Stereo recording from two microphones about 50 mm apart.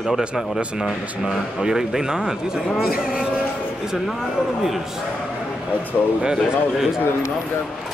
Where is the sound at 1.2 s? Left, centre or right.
Centre.